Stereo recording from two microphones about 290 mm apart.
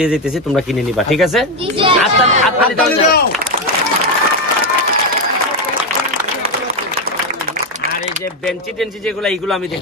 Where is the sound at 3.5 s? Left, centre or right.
Right.